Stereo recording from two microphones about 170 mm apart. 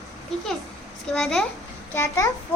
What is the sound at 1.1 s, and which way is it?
Speech, centre (ahead or behind).